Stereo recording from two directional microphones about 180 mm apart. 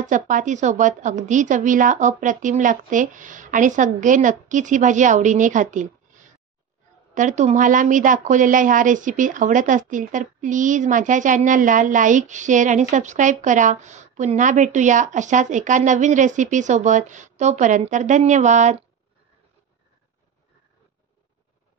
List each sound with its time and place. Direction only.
0.0 s speech: 45° right (ahead or behind)